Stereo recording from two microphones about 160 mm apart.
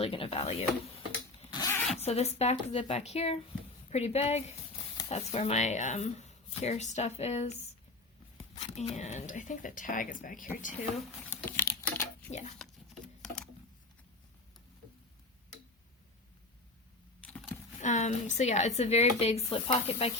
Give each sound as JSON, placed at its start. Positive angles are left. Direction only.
{"t": 0.0, "sound": "speech", "side_deg": 35}
{"t": 1.5, "sound": "zipper", "side_deg": 20}
{"t": 2.0, "sound": "speech", "side_deg": 40}
{"t": 8.5, "sound": "speech", "side_deg": 40}
{"t": 11.4, "sound": "crumpling", "side_deg": 15}
{"t": 12.3, "sound": "speech", "side_deg": 45}
{"t": 12.5, "sound": "a sound", "side_deg": 5}
{"t": 17.2, "sound": "a sound", "side_deg": 5}
{"t": 17.7, "sound": "speech", "side_deg": 50}